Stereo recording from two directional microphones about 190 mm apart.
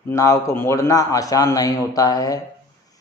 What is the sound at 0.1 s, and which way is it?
A man's voice, 15° left (ahead or behind).